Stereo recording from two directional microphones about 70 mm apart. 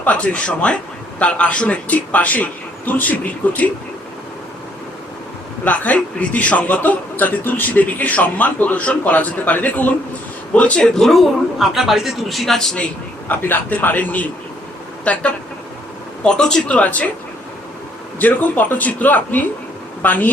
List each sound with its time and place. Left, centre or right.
0.0 s a man's voice: centre
5.6 s a man's voice: left; by 12.7 s centre
12.7 s a man's voice: left
18.2 s a man's voice: left